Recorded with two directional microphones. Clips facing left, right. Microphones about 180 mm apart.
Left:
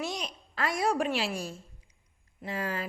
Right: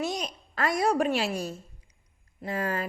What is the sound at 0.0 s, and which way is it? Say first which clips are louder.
A woman's voice: right 4 dB; 40° right (ahead or behind).